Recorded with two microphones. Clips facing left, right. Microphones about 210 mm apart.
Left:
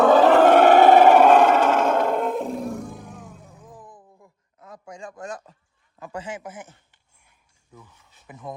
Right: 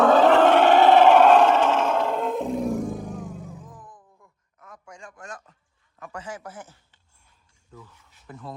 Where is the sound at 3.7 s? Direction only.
30° left (ahead or behind).